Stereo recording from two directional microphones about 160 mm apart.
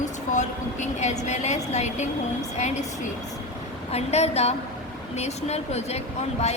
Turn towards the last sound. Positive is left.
turn(degrees=40)  # may be behind; listen again after turning